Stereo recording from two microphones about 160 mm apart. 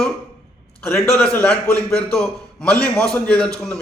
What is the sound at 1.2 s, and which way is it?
A man's voice, 10° left (ahead or behind).